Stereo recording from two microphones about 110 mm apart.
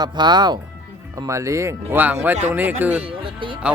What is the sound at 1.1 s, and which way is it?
Speech, 30° right (ahead or behind).